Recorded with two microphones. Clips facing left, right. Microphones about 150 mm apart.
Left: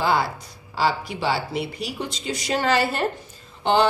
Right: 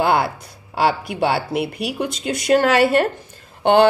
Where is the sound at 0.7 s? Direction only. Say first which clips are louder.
Right 5 dB; 60° right (ahead or behind).